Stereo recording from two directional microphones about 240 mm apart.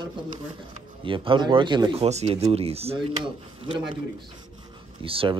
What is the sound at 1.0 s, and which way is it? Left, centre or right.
Speech, right.